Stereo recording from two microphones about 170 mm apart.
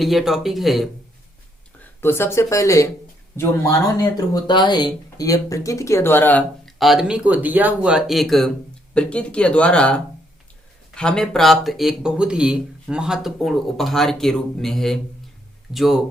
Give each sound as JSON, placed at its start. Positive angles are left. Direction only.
{"t": 0.0, "sound": "speech", "side_deg": 0}
{"t": 2.0, "sound": "speech", "side_deg": 15}
{"t": 6.7, "sound": "speech", "side_deg": 0}